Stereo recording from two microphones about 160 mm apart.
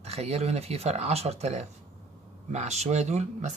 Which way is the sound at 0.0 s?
40° right (ahead or behind).